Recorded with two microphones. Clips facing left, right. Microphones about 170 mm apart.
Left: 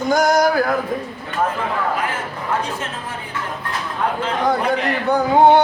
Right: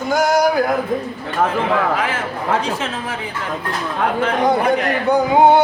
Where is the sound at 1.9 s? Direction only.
90° right.